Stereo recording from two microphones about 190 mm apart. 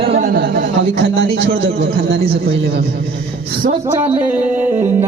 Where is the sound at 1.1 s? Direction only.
65° right (ahead or behind).